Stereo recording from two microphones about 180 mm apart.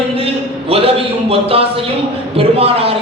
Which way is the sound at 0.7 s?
30° right (ahead or behind).